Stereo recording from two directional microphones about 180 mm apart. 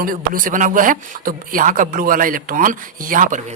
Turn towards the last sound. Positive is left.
turn(degrees=-50)  # may be behind; listen again after turning